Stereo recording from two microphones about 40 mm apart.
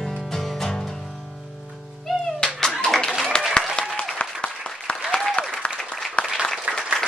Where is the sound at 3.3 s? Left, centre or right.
Left.